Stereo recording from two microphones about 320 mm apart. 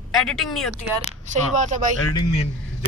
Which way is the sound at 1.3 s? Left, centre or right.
Right.